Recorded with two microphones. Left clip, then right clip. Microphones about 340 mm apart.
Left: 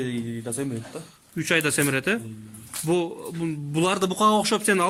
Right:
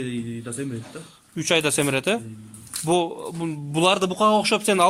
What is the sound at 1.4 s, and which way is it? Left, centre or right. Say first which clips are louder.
Speech: right 2 dB; centre.